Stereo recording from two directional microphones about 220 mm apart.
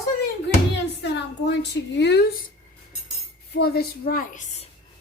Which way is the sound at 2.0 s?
50° left (ahead or behind).